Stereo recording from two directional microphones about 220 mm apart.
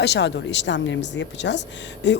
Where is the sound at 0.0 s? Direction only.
50° left (ahead or behind).